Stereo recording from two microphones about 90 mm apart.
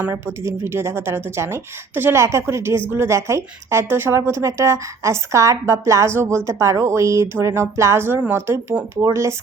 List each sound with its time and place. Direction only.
0.1 s speech: 30° right (ahead or behind)